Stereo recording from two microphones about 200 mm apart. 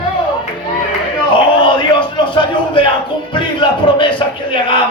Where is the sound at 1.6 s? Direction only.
25° left (ahead or behind).